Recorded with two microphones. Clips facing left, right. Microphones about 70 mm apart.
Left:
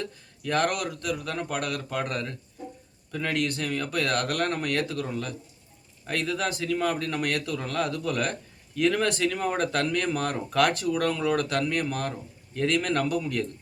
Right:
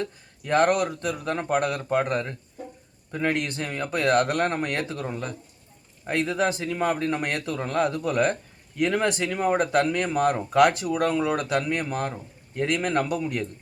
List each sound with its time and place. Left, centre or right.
0.0 s speech: right